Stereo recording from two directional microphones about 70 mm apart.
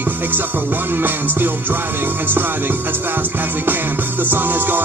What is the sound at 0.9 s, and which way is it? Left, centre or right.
Music, right.